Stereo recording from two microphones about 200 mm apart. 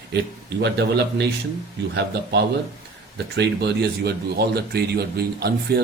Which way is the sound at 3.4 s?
55° right (ahead or behind).